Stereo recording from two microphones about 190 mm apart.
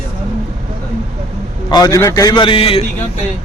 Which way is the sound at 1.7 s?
20° left (ahead or behind).